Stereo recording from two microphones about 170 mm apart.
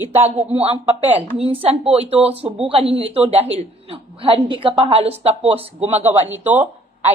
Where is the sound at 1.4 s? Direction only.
35° right (ahead or behind).